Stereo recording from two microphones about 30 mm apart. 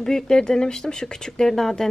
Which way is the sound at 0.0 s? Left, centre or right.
Centre.